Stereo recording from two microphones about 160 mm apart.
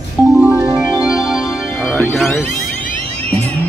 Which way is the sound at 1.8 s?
5° left (ahead or behind).